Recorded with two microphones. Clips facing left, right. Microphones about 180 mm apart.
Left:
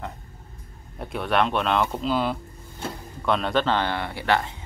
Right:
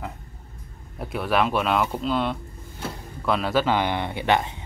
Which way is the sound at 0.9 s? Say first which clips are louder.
Even; centre (ahead or behind).